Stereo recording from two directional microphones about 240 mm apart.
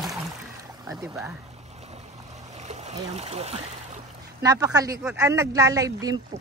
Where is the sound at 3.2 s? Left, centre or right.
Right.